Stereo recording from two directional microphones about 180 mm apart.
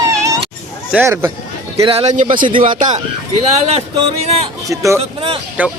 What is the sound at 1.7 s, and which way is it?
Speech, 35° right (ahead or behind).